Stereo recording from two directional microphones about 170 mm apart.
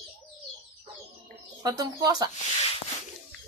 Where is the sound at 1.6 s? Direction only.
20° right (ahead or behind).